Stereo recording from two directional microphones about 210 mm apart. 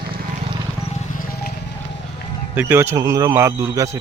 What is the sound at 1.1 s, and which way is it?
Music, 45° left (ahead or behind).